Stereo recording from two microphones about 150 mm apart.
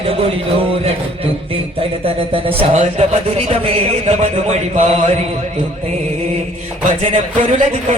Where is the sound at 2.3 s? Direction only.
40° right (ahead or behind).